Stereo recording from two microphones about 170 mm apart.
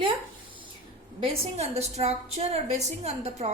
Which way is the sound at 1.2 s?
35° right (ahead or behind).